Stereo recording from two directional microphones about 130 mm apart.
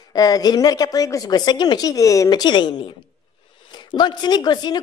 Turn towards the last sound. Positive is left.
turn(degrees=35)  # may be behind; listen again after turning